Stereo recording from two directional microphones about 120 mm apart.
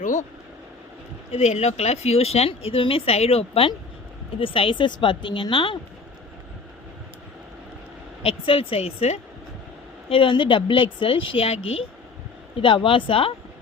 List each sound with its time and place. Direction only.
0.0 s speech: 90° left
1.3 s speech: 65° left (ahead or behind); by 5.7 s 45° left (ahead or behind)
8.2 s speech: 50° left (ahead or behind)
10.1 s speech: 45° left (ahead or behind)